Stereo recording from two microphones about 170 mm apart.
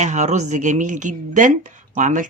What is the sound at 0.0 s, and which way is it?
Speech, 45° right (ahead or behind).